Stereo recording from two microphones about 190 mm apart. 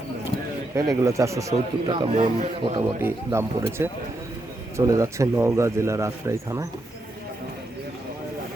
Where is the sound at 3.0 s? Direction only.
15° right (ahead or behind).